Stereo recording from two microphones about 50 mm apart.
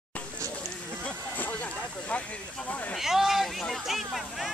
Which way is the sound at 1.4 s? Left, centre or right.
Left.